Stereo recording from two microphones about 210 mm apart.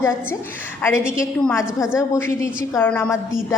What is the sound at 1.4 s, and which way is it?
A woman's voice, 10° left (ahead or behind).